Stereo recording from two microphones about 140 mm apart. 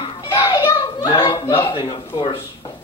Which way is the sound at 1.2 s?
40° left (ahead or behind).